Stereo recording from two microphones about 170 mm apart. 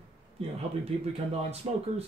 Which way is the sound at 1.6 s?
35° right (ahead or behind).